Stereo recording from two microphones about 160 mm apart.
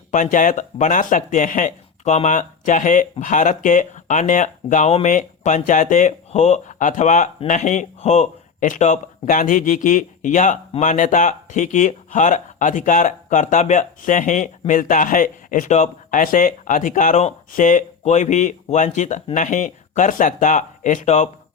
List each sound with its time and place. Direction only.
0.1 s speech: 55° left (ahead or behind)